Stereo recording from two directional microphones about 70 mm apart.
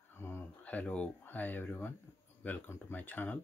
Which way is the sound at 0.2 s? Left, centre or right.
Left.